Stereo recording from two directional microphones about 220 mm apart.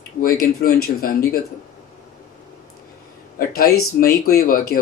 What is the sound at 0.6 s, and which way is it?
Speech, 40° left (ahead or behind).